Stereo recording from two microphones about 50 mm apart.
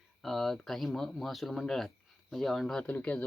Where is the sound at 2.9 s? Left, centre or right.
Left.